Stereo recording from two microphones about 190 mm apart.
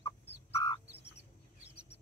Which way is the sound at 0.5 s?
20° left (ahead or behind).